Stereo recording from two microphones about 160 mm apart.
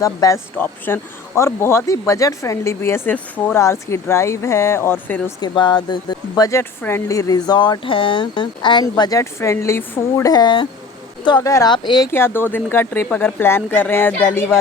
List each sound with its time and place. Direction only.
0.0 s speech: 20° left (ahead or behind)
5.4 s speech: 25° left (ahead or behind)
12.1 s speech: 15° left (ahead or behind)